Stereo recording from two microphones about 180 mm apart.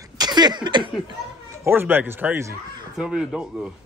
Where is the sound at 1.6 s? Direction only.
10° right (ahead or behind).